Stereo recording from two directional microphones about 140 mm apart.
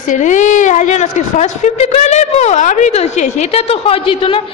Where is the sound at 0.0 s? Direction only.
65° left (ahead or behind).